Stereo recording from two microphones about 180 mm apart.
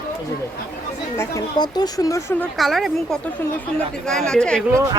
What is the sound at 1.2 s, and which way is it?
Speech, 20° left (ahead or behind).